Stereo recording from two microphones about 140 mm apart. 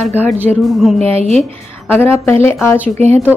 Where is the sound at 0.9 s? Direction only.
45° right (ahead or behind).